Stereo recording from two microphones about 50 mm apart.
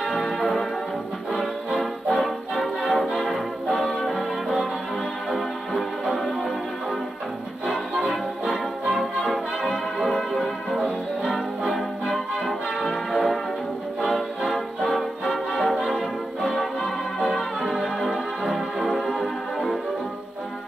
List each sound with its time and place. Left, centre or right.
0.0 s church bell: centre
1.3 s music: centre
8.8 s brass instrument: centre
11.6 s music: centre